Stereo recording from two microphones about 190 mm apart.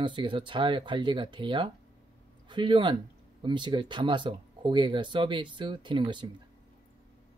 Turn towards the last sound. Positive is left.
turn(degrees=-25)  # may be behind; listen again after turning